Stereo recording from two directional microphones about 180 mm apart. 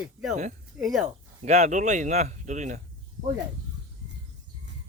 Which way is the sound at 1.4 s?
40° right (ahead or behind).